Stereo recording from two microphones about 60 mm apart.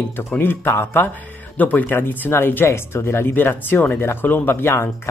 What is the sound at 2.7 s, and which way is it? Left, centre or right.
Speech, left.